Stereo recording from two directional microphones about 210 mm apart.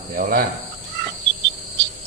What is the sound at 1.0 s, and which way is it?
Cricket, 55° right (ahead or behind).